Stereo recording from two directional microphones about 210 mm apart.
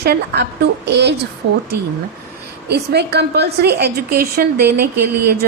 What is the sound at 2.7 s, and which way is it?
A woman's voice, 50° right (ahead or behind).